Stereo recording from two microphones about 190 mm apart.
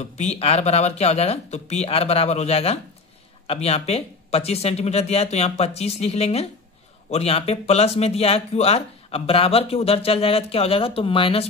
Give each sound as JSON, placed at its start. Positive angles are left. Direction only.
{"t": 0.0, "sound": "speech", "side_deg": 35}